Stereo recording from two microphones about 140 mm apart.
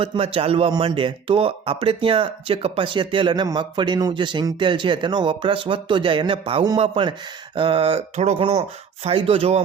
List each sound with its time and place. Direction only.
0.0 s speech: 45° right (ahead or behind)